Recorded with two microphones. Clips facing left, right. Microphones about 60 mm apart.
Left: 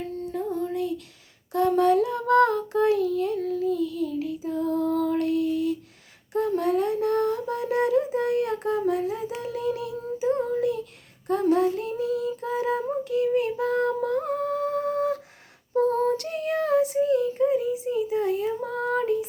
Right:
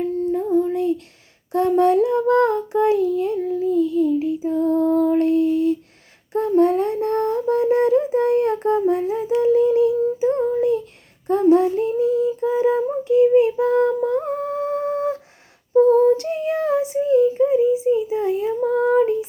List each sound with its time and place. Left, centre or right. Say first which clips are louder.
0.7 s a sound: right 7 dB; right
1.5 s child singing: right 4 dB; right
6.3 s a sound: right 7 dB; right
9.4 s child singing: right 17 dB; right
15.8 s female singing: right 9 dB; right
16.0 s child singing: right 7 dB; right